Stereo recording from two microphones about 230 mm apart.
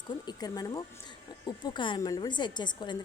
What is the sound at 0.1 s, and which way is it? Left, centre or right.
Speech, centre.